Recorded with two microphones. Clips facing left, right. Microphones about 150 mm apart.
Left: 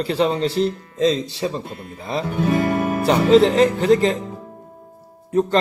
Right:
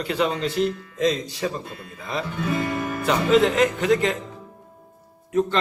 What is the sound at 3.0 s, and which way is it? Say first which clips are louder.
Speech: left 4 dB; 35° left (ahead or behind).